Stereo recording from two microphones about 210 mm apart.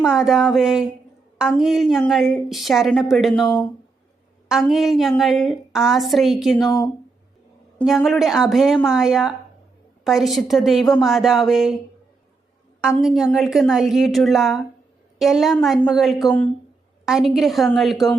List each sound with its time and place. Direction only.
0.0 s a woman's voice: 5° right (ahead or behind)
6.7 s speech: 15° left (ahead or behind)
7.8 s a woman's voice: centre (ahead or behind)
13.0 s a woman's voice: centre (ahead or behind)